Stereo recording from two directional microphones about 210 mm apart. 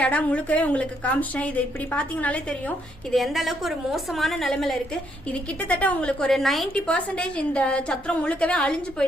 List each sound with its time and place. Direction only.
0.0 s a woman's voice: 5° left (ahead or behind)